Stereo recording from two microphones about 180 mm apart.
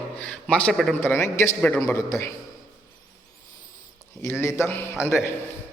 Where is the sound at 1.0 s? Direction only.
15° left (ahead or behind).